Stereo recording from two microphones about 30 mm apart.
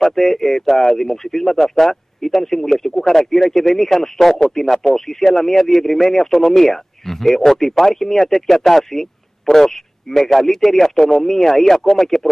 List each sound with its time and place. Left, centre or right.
0.0 s speech: centre